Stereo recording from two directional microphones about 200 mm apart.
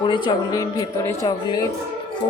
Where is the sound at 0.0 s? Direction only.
20° left (ahead or behind).